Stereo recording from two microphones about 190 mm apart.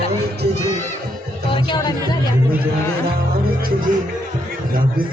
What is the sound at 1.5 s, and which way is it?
Music, 20° left (ahead or behind).